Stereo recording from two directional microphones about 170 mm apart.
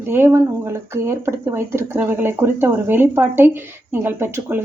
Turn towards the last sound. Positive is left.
turn(degrees=-15)  # may be behind; listen again after turning